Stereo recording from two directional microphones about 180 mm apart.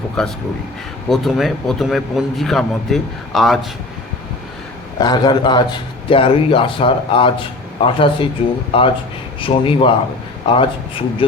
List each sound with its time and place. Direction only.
0.2 s a man's voice: centre (ahead or behind)
4.9 s a man's voice: 25° left (ahead or behind)